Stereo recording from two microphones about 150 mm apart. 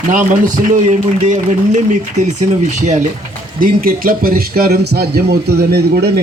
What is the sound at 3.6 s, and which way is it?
A man's voice, 70° right (ahead or behind).